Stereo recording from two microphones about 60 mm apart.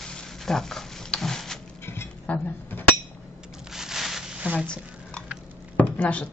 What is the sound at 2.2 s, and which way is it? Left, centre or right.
Speech, left.